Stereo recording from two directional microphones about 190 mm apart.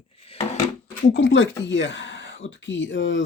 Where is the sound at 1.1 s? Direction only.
70° left (ahead or behind).